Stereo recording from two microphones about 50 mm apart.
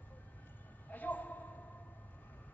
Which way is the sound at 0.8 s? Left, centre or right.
Left.